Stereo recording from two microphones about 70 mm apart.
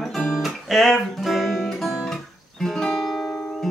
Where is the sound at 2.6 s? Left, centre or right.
Centre.